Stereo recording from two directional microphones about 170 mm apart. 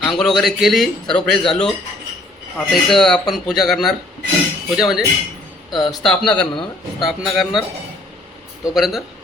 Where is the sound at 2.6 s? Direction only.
Centre (ahead or behind).